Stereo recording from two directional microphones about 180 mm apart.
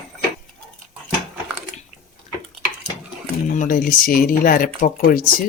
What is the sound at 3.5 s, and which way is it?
Speech, 50° left (ahead or behind).